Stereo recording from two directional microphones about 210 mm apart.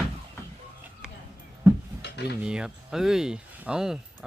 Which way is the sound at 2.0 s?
55° left (ahead or behind).